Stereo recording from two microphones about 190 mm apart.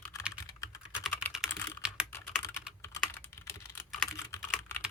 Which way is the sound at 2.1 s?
10° left (ahead or behind).